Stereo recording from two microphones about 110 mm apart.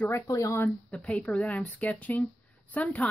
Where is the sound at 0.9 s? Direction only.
10° left (ahead or behind).